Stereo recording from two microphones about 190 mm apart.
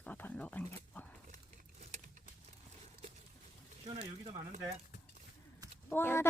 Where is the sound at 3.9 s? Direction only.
25° right (ahead or behind).